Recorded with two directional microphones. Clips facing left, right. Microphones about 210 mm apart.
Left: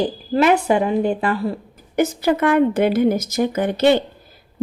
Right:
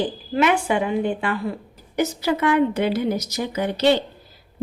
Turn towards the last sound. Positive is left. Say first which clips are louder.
# left 3 dB
turn(degrees=50)  # may be behind; listen again after turning